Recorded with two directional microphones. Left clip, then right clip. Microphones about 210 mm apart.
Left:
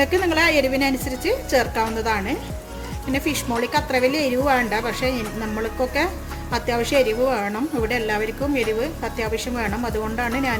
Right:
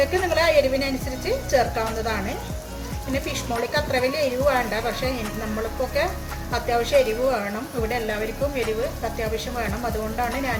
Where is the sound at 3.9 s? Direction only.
50° left (ahead or behind).